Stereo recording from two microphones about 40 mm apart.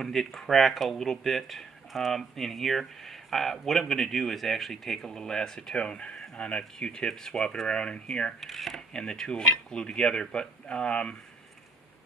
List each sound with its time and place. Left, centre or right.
0.0 s speech: centre
7.6 s speech: left
8.4 s speech: centre
9.1 s speech: centre